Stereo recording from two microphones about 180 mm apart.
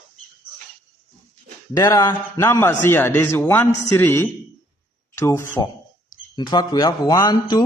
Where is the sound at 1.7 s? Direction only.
20° left (ahead or behind).